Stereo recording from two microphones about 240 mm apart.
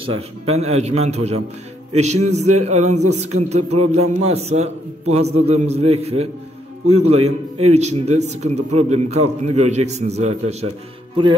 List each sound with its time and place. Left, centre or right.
0.5 s speech: right